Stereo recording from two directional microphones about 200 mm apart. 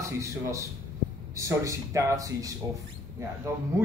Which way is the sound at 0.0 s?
15° right (ahead or behind).